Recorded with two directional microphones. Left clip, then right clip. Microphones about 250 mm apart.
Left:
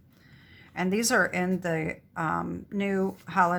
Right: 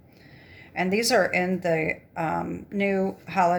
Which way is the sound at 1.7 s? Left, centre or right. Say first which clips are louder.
Right 6 dB; left.